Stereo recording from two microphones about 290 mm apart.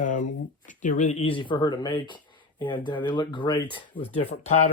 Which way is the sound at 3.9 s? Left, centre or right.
Left.